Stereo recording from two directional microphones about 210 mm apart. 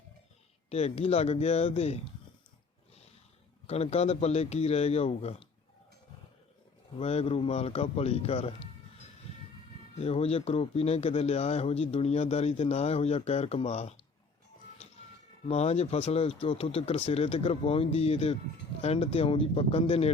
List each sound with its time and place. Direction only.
0.7 s a man's voice: 30° left (ahead or behind)
3.7 s speech: 30° left (ahead or behind)
7.0 s a man's voice: 30° left (ahead or behind)
9.9 s a man's voice: 30° left (ahead or behind)
15.4 s a man's voice: 30° left (ahead or behind)